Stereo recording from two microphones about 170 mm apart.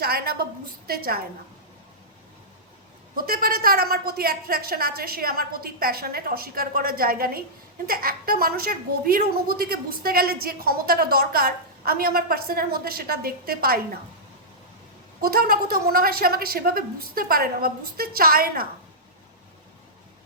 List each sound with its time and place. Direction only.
0.0 s a woman's voice: 65° right (ahead or behind)
3.2 s a woman's voice: 60° right (ahead or behind)
15.2 s a woman's voice: 60° right (ahead or behind)